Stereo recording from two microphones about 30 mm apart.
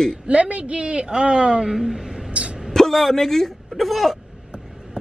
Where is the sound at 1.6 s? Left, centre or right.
Centre.